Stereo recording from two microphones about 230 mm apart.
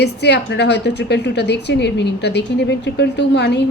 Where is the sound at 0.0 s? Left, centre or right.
Left.